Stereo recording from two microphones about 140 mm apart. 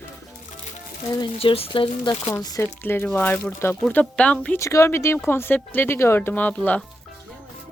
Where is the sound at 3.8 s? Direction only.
10° left (ahead or behind).